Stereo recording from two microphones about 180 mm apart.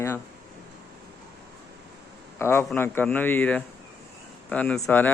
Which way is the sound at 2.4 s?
15° left (ahead or behind).